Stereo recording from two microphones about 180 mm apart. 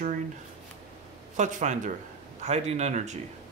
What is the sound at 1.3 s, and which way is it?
Speech, 45° right (ahead or behind).